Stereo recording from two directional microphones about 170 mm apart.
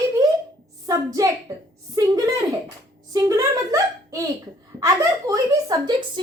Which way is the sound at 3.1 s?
20° right (ahead or behind).